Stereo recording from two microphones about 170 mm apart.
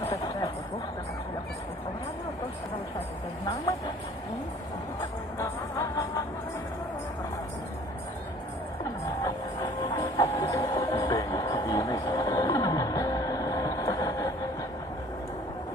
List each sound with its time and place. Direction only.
0.0 s a sound: 20° left (ahead or behind)
5.4 s music: 15° left (ahead or behind)
9.2 s music: 20° left (ahead or behind)